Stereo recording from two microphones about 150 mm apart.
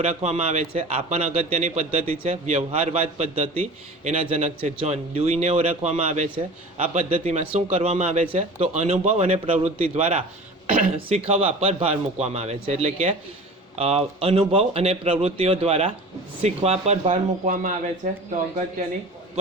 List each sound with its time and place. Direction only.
0.0 s a man's voice: 50° right (ahead or behind)